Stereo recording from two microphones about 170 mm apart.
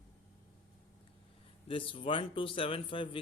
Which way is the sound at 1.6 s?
30° left (ahead or behind).